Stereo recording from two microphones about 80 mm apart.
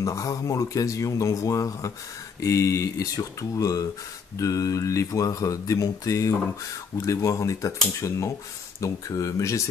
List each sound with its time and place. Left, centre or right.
0.0 s speech: left